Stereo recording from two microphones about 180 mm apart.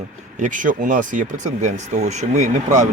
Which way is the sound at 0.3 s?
45° right (ahead or behind).